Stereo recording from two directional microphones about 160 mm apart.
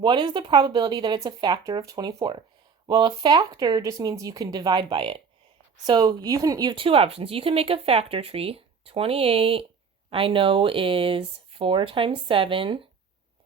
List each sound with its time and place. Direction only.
0.0 s speech: 30° right (ahead or behind)